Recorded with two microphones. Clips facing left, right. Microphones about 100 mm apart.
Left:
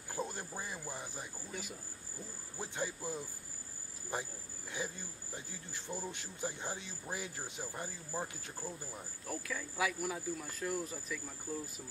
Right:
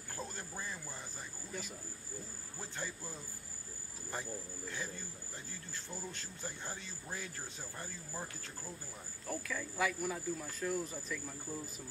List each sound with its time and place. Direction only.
0.1 s cricket: 15° left (ahead or behind)
2.6 s speech: 15° left (ahead or behind)
9.3 s speech: 5° left (ahead or behind)